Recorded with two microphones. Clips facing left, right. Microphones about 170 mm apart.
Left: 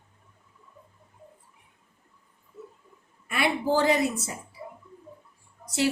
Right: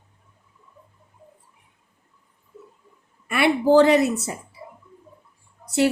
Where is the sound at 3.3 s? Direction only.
70° right (ahead or behind).